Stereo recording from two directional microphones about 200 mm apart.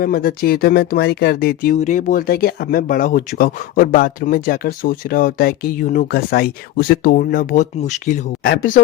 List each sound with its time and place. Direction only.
0.0 s speech: 50° left (ahead or behind)